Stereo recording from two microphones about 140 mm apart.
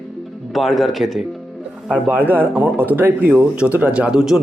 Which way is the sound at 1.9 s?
10° right (ahead or behind).